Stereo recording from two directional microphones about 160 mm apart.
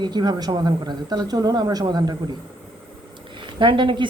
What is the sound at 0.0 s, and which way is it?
Speech, 25° right (ahead or behind).